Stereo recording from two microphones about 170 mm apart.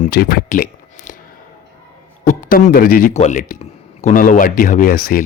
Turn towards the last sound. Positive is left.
turn(degrees=55)  # may be behind; listen again after turning